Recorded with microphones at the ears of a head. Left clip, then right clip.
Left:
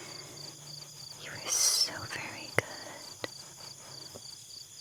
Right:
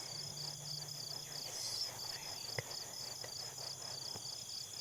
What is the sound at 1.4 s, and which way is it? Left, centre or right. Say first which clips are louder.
Whispering: left 15 dB; left.